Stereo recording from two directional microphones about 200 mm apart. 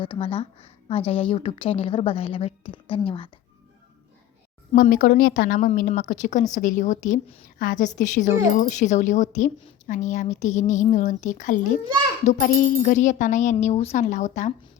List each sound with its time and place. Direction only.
0.0 s a woman's voice: 25° left (ahead or behind)
4.7 s a woman's voice: 40° left (ahead or behind)